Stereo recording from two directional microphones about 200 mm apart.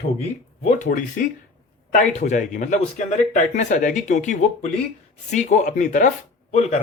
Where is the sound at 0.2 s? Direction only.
35° left (ahead or behind).